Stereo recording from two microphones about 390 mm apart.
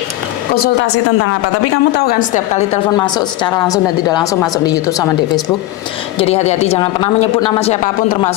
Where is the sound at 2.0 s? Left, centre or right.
Left.